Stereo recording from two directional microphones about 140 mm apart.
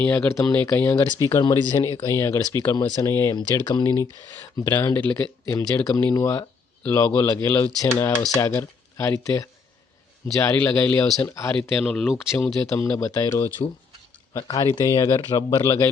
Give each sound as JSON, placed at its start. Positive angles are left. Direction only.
{"t": 0.0, "sound": "speech", "side_deg": 15}
{"t": 10.5, "sound": "speech", "side_deg": 10}
{"t": 11.8, "sound": "speech", "side_deg": 5}
{"t": 12.5, "sound": "speech", "side_deg": 20}